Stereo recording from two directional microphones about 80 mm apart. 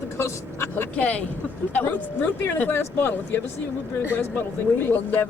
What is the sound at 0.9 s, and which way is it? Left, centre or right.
Speech, centre.